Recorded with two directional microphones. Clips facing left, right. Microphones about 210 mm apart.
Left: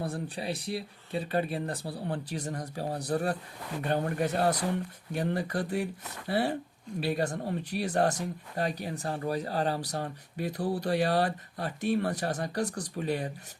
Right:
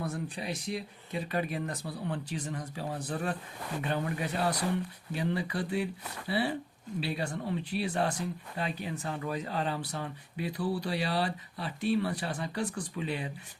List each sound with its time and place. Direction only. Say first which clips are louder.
0.0 s speech: left 2 dB; 30° left (ahead or behind)